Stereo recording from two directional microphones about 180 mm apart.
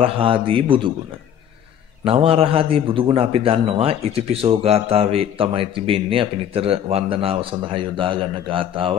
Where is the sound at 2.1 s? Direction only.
30° right (ahead or behind).